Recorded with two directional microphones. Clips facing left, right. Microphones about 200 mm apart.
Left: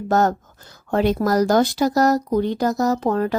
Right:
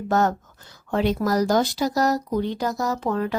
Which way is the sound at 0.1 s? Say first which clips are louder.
Left 3 dB; 40° left (ahead or behind).